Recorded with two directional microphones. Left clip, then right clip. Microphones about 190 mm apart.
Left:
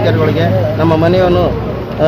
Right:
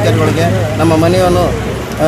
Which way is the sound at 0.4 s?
Centre (ahead or behind).